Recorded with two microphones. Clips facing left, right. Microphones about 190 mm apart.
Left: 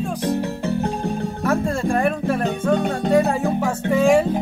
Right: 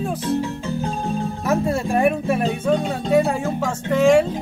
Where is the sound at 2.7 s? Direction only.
60° left (ahead or behind).